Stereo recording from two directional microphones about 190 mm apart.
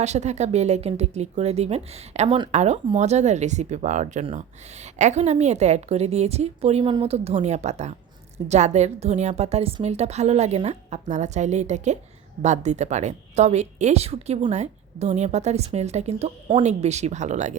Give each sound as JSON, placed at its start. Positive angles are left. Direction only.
{"t": 0.0, "sound": "speech", "side_deg": -35}